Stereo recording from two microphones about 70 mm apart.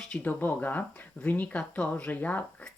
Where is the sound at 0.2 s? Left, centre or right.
Left.